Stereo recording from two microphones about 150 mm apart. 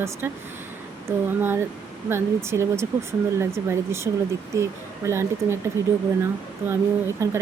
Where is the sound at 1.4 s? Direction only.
15° right (ahead or behind).